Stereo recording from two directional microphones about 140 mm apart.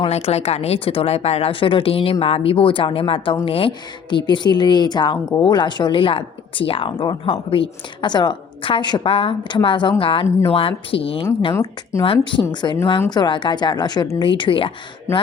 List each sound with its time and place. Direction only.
0.0 s speech: 50° left (ahead or behind)
11.6 s speech: 20° left (ahead or behind)
12.0 s speech: 40° left (ahead or behind)